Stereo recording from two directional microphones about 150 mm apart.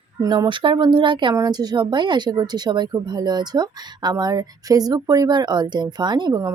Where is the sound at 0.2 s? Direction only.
30° right (ahead or behind).